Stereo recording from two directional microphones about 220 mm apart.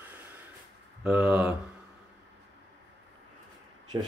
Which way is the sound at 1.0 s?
5° right (ahead or behind).